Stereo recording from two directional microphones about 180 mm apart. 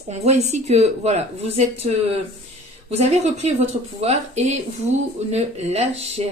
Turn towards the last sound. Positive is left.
turn(degrees=-35)  # may be behind; listen again after turning